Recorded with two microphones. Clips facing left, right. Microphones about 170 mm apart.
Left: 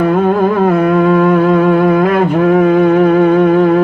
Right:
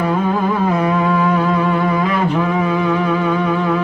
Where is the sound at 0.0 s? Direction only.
55° left (ahead or behind).